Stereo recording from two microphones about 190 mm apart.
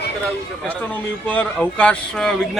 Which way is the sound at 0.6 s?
10° left (ahead or behind).